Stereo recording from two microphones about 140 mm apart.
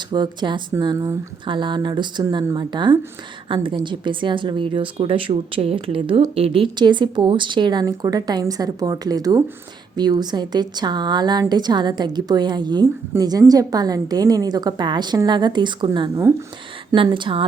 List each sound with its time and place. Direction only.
0.1 s a woman's voice: 30° right (ahead or behind)
16.9 s a woman's voice: 35° right (ahead or behind)